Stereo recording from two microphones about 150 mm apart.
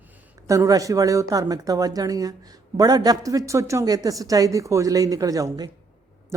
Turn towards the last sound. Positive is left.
turn(degrees=-25)  # may be behind; listen again after turning